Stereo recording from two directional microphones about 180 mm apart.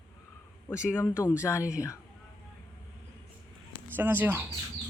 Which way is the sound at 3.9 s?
10° right (ahead or behind).